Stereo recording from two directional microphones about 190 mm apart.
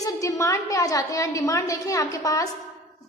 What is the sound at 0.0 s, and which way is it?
A woman's voice, 15° left (ahead or behind).